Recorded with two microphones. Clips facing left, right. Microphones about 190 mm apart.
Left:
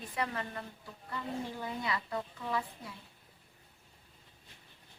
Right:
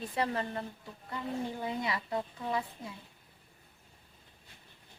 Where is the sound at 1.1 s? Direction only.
20° right (ahead or behind).